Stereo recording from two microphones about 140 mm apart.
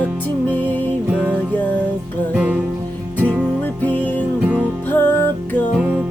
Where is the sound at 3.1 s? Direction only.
10° right (ahead or behind).